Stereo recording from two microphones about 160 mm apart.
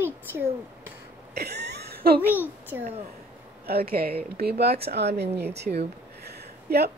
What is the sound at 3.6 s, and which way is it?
Speech, 75° right (ahead or behind).